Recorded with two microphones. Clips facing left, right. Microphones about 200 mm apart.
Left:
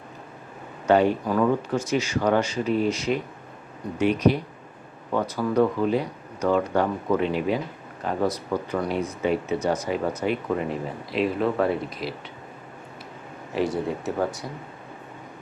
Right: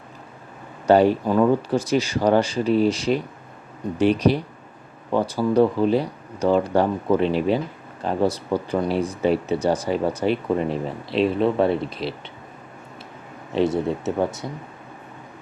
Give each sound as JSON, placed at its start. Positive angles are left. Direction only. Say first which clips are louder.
{"t": 0.9, "sound": "speech", "louder": "right 4 dB", "side_deg": -35}
{"t": 13.5, "sound": "speech", "louder": "right 4 dB", "side_deg": -25}